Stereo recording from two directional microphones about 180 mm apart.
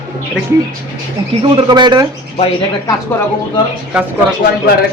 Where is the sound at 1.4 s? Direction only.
25° right (ahead or behind).